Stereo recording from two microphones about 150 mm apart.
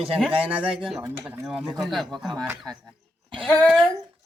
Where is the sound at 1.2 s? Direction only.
20° right (ahead or behind).